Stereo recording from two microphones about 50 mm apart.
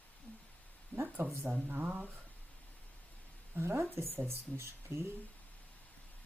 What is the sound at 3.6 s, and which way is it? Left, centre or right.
Speech, right.